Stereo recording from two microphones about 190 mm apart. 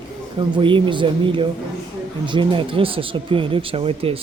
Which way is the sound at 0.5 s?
25° right (ahead or behind).